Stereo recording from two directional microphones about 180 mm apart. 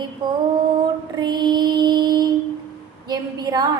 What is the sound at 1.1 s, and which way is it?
Music, 25° right (ahead or behind).